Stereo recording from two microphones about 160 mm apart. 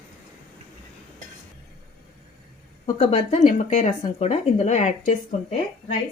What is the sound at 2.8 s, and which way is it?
Speech, 40° left (ahead or behind).